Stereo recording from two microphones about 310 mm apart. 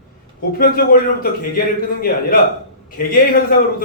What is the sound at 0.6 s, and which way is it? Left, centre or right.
A man's voice, left.